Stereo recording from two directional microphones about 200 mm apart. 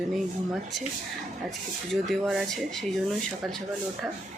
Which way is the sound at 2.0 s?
Centre (ahead or behind).